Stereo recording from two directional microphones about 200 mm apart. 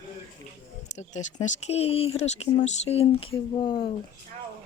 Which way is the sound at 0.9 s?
35° left (ahead or behind).